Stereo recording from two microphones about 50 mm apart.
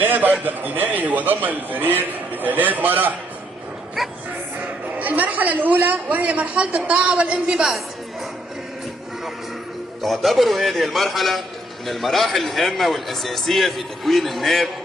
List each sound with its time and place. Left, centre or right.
0.0 s a man's voice: right
4.9 s a man's voice: right; by 7.7 s centre
10.0 s a man's voice: centre